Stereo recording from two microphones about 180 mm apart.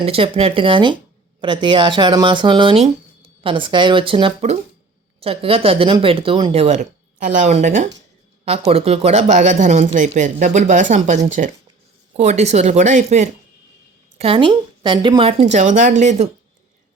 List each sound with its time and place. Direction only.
0.0 s speech: 30° right (ahead or behind)
14.2 s speech: 30° right (ahead or behind)